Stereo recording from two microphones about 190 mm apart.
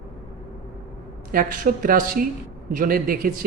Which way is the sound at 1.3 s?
45° right (ahead or behind).